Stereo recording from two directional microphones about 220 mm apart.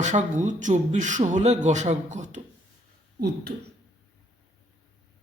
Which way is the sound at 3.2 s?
45° right (ahead or behind).